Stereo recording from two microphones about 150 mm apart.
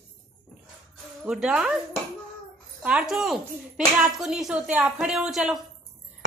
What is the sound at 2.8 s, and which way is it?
A woman's voice, 5° right (ahead or behind).